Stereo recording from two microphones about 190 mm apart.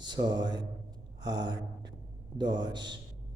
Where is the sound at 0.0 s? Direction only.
20° right (ahead or behind).